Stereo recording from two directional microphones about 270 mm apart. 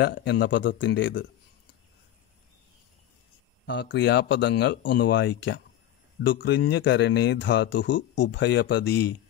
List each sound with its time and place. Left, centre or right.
0.0 s speech: left
3.6 s speech: left